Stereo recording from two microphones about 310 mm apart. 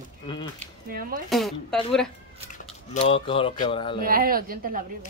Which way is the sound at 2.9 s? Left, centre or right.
Centre.